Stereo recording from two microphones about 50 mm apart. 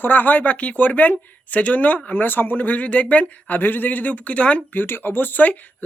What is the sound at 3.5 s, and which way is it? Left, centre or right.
Speech, left.